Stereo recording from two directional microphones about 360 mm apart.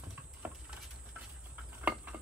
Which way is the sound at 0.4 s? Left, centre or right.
Centre.